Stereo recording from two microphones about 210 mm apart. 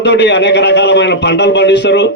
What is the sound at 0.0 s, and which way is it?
A man's voice, 55° left (ahead or behind).